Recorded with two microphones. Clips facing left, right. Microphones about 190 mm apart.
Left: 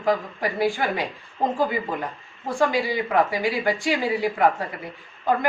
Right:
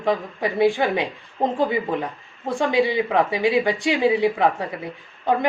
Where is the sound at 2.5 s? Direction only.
25° right (ahead or behind).